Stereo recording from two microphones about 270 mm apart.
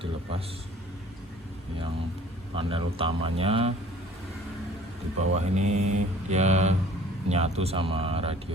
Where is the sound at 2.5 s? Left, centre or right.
Centre.